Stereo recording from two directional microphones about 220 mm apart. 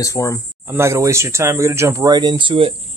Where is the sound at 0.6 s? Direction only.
10° right (ahead or behind).